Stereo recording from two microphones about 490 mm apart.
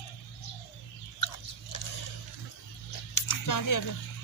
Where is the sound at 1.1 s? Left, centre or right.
Left.